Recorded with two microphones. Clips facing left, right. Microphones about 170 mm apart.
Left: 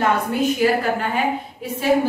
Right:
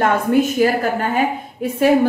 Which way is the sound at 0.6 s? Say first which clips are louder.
Left 1 dB; 45° right (ahead or behind).